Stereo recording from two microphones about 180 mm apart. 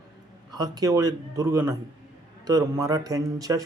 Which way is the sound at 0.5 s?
20° right (ahead or behind).